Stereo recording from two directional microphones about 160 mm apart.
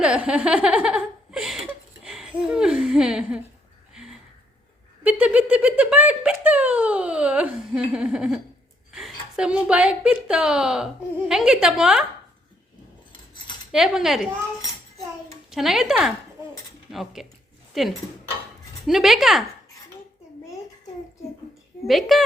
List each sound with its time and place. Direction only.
0.0 s a sound: 5° right (ahead or behind)
8.9 s a woman's voice: centre (ahead or behind)
13.7 s a woman's voice: 5° right (ahead or behind)
15.4 s a woman's voice: centre (ahead or behind)
21.8 s a woman's voice: centre (ahead or behind)